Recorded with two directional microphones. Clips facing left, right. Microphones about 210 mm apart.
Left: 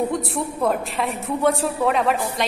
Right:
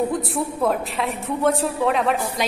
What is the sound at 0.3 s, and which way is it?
A woman's voice, centre (ahead or behind).